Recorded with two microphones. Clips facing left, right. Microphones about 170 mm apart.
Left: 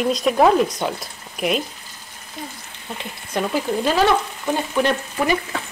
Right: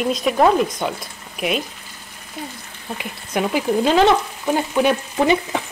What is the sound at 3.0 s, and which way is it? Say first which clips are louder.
Speech: right 2 dB; 10° right (ahead or behind).